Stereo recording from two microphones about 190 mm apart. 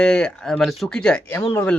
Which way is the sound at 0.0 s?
5° left (ahead or behind).